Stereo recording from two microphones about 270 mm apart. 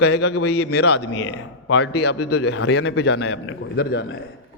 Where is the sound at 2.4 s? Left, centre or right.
Left.